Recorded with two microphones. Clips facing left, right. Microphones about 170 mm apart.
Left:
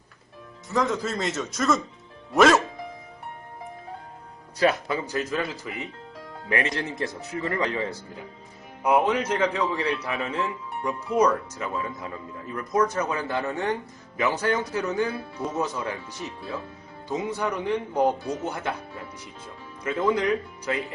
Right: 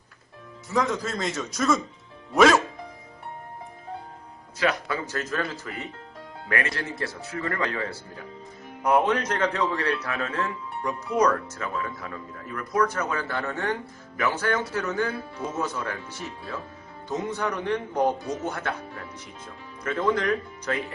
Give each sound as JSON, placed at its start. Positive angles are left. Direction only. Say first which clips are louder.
{"t": 0.7, "sound": "speech", "louder": "left 1 dB", "side_deg": 0}
{"t": 4.9, "sound": "a man's voice", "louder": "left 2 dB", "side_deg": 15}